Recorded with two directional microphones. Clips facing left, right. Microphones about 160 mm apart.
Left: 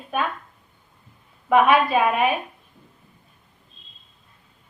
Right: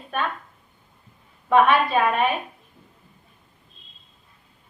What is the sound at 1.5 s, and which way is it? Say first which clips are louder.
Speech: left 1 dB; 5° left (ahead or behind).